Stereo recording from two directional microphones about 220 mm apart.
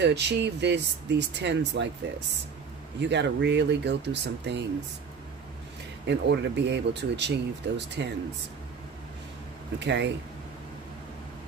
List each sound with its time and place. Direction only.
0.0 s speech: 50° right (ahead or behind)
6.0 s speech: 50° right (ahead or behind)